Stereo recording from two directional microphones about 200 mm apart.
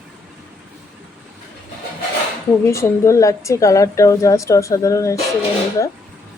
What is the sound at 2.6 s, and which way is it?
A woman's voice, 15° left (ahead or behind).